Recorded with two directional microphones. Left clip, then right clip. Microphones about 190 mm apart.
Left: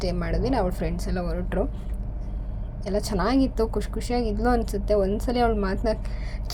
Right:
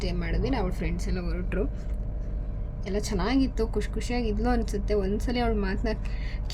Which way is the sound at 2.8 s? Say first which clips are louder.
Left 4 dB; 10° left (ahead or behind).